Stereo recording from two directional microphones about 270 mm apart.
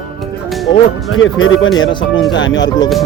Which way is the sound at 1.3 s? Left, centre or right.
Left.